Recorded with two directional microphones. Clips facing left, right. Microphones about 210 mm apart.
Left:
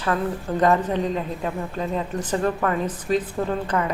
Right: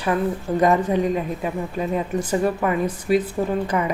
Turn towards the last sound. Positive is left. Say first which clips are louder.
# right 2 dB
turn(degrees=-10)  # may be behind; listen again after turning